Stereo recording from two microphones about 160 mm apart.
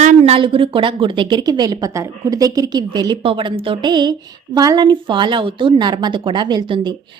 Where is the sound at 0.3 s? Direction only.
35° right (ahead or behind).